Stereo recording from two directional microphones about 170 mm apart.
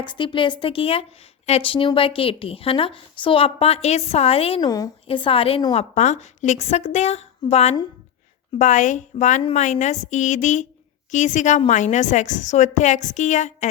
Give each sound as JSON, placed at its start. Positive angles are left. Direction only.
{"t": 0.0, "sound": "a woman's voice", "side_deg": 30}